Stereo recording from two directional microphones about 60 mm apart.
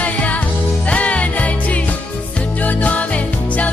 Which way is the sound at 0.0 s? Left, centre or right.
Left.